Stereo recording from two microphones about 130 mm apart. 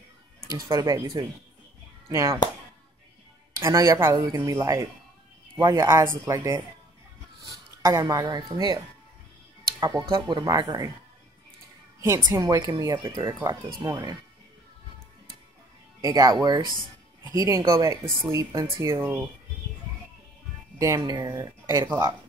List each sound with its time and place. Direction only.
0.5 s a child's voice: 25° right (ahead or behind)
3.5 s speech: 20° right (ahead or behind)
12.3 s speech: 30° right (ahead or behind)
16.0 s speech: 30° right (ahead or behind)
20.8 s speech: 30° right (ahead or behind)